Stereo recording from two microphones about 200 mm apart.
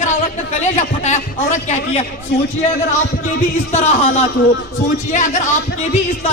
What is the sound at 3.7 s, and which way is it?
Speech, 35° left (ahead or behind).